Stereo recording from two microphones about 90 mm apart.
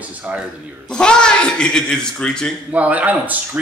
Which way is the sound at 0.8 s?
10° left (ahead or behind).